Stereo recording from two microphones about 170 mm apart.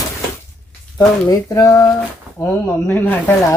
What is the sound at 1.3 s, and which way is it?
Speech, 20° left (ahead or behind).